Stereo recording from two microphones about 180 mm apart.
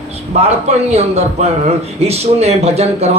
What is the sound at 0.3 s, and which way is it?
Speech, 35° right (ahead or behind).